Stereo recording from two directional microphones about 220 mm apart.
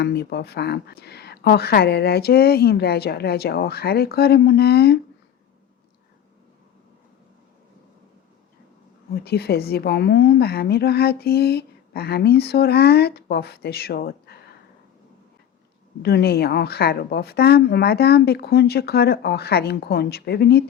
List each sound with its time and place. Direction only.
0.0 s a woman's voice: 50° left (ahead or behind)
9.2 s a woman's voice: 45° left (ahead or behind)
16.0 s a woman's voice: 45° left (ahead or behind)